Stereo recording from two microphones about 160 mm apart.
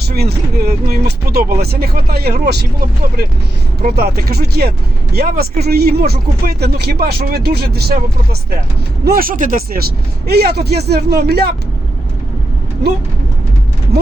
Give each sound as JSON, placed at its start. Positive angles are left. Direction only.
{"t": 0.0, "sound": "speech", "side_deg": -85}
{"t": 3.8, "sound": "speech", "side_deg": -70}
{"t": 9.0, "sound": "speech", "side_deg": -65}
{"t": 10.2, "sound": "speech", "side_deg": -85}